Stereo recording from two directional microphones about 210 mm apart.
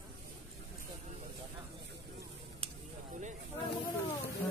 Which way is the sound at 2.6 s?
25° right (ahead or behind).